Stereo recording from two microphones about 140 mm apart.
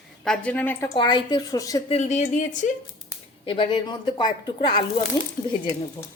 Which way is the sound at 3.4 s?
40° left (ahead or behind).